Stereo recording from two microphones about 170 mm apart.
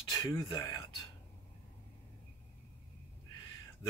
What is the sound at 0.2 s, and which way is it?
Speech, 25° left (ahead or behind).